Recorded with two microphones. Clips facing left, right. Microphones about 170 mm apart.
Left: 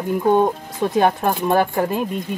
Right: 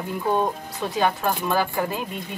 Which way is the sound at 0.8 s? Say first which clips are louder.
Left 6 dB; 50° left (ahead or behind).